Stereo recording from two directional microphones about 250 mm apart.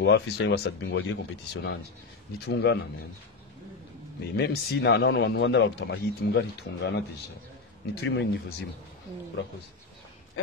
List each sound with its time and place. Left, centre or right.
0.0 s a man's voice: left
4.4 s speech: left